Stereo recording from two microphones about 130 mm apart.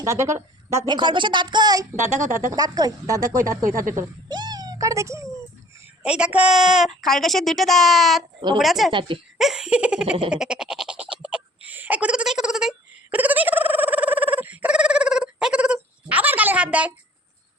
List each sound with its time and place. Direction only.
0.0 s a woman's voice: 25° right (ahead or behind)
0.9 s a woman's voice: 35° right (ahead or behind)
4.3 s a sound: 35° right (ahead or behind)
6.0 s a woman's voice: 5° right (ahead or behind)
8.9 s a woman's voice: 40° right (ahead or behind)
9.4 s laughter: 5° right (ahead or behind)
10.2 s goat: 5° right (ahead or behind)